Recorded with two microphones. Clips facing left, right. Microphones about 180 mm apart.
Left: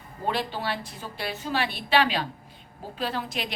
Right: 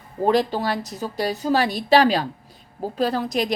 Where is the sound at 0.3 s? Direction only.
40° right (ahead or behind).